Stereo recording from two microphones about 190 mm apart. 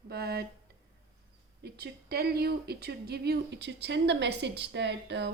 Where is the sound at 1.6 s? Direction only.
55° right (ahead or behind).